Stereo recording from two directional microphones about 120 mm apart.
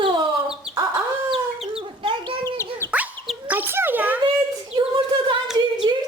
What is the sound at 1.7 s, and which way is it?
Bird, 45° right (ahead or behind).